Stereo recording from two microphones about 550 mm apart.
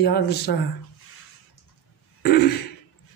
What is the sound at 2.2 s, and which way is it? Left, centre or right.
Throat clearing, centre.